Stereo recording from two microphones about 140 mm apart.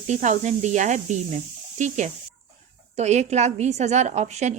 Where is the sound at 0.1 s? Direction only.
55° right (ahead or behind).